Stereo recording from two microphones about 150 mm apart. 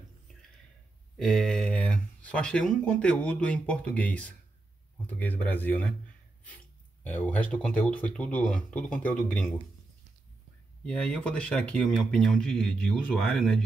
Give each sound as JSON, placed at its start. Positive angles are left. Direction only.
{"t": 1.1, "sound": "speech", "side_deg": 5}
{"t": 10.9, "sound": "speech", "side_deg": 5}